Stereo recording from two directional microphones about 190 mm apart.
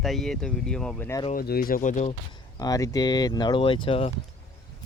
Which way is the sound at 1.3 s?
50° left (ahead or behind).